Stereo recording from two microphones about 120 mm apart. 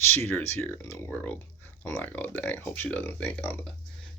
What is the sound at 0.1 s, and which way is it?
Speech, 20° left (ahead or behind).